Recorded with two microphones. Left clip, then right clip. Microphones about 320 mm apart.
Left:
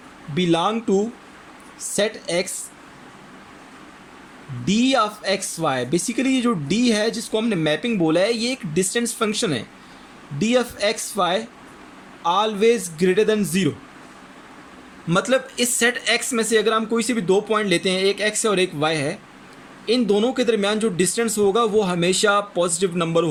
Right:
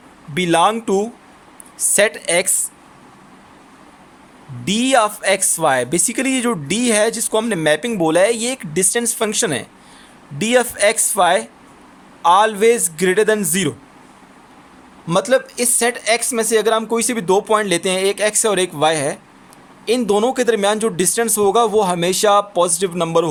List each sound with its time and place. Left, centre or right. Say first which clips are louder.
0.3 s speech: right 6 dB; right
4.6 s speech: right 4 dB; right
15.0 s speech: right 4 dB; centre